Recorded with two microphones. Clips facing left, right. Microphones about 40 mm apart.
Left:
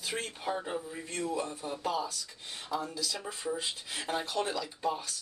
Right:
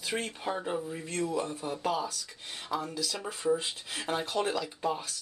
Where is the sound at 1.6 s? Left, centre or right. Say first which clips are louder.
Right 2 dB; right.